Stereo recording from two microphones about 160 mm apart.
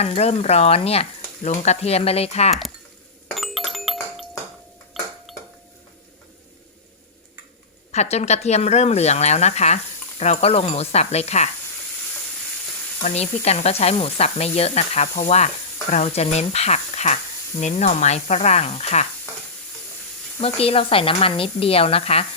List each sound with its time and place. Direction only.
0.0 s snake: 40° left (ahead or behind)
3.2 s doorbell: centre (ahead or behind)
4.9 s ping: centre (ahead or behind)
7.9 s speech: 45° left (ahead or behind)
13.0 s snake: 45° left (ahead or behind)
15.9 s speech: 45° left (ahead or behind)
20.4 s snake: 40° left (ahead or behind)